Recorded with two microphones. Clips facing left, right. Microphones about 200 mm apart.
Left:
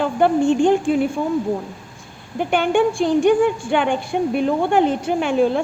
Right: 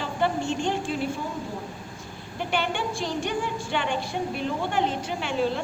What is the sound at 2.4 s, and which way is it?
A woman's voice, 50° left (ahead or behind).